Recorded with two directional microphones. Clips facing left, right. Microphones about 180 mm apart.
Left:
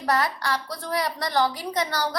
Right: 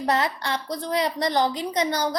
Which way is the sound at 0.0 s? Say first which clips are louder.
Right 1 dB; 20° right (ahead or behind).